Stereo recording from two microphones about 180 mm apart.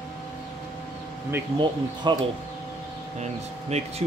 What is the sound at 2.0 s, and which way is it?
Speech, 25° right (ahead or behind).